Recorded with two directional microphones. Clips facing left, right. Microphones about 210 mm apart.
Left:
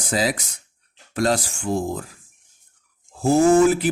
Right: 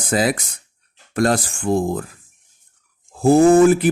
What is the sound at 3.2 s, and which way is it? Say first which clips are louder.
Speech: right 4 dB; 55° right (ahead or behind).